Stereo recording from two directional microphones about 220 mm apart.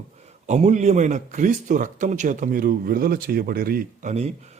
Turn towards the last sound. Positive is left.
turn(degrees=-30)  # may be behind; listen again after turning